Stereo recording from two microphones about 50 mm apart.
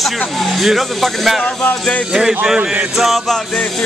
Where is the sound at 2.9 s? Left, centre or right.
Centre.